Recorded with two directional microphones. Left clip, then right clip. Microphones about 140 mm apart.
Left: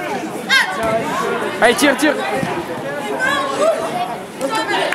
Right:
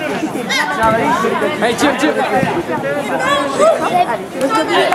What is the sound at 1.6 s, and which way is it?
Speech, 15° left (ahead or behind).